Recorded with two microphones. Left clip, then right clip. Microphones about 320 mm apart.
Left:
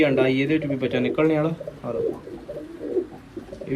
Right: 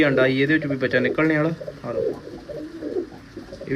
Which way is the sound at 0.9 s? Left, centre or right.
Centre.